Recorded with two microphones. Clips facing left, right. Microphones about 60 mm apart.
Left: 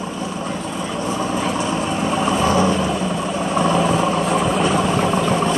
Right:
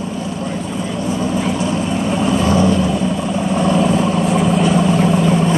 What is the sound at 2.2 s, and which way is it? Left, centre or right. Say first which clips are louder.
Boat: right 2 dB; centre.